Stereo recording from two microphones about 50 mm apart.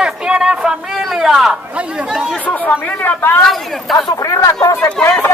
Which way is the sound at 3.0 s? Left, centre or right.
Left.